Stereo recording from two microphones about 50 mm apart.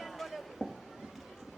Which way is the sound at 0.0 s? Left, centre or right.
Centre.